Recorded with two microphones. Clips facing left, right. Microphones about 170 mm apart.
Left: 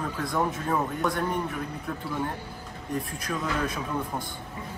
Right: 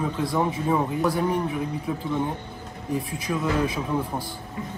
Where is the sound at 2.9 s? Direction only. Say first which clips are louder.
Right 4 dB; 5° right (ahead or behind).